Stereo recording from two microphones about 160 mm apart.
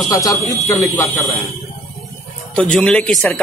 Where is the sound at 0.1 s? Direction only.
20° left (ahead or behind).